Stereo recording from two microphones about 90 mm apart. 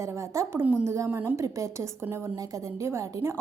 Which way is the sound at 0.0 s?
35° right (ahead or behind).